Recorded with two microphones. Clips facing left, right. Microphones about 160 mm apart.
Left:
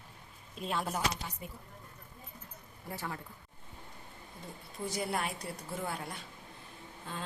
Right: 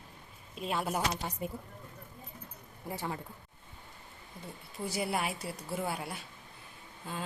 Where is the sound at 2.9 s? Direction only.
20° right (ahead or behind).